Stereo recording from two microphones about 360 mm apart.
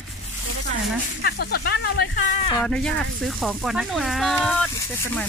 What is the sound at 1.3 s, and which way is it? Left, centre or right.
Speech, left.